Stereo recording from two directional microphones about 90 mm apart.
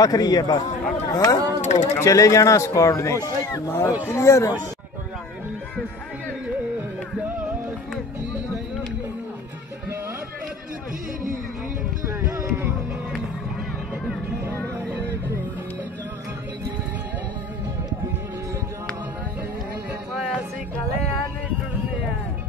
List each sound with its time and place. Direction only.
0.0 s a man's voice: 45° left (ahead or behind)
12.1 s music: 35° right (ahead or behind)